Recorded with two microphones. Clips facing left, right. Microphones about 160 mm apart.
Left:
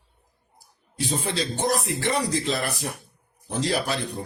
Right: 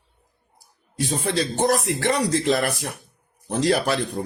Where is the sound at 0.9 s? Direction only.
50° right (ahead or behind).